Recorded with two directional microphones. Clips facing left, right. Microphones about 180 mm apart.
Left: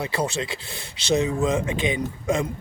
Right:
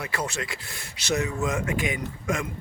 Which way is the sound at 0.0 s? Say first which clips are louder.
Left 5 dB; 30° left (ahead or behind).